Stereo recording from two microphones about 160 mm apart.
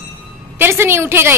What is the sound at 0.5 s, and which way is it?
Speech, 15° right (ahead or behind).